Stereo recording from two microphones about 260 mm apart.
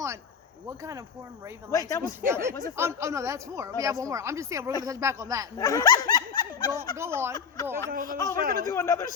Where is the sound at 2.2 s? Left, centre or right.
Centre.